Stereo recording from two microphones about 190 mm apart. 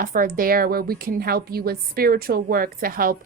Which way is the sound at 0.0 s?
45° right (ahead or behind).